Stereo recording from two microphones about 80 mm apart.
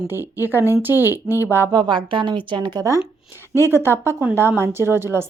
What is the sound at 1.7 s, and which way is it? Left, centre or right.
A woman's voice, right.